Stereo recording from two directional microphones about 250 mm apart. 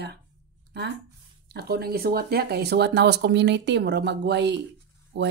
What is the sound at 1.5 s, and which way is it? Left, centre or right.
Speech, right.